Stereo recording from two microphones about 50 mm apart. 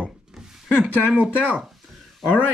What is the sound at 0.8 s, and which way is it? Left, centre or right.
Speech, right.